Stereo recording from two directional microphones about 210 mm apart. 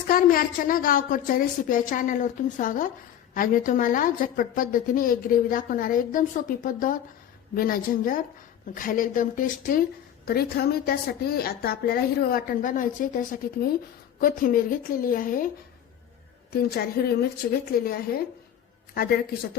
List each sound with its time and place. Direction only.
0.1 s a woman's voice: 45° left (ahead or behind)
16.5 s a woman's voice: 50° left (ahead or behind)